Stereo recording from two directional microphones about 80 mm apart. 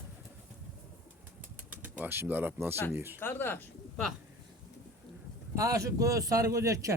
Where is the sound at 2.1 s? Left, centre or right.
Right.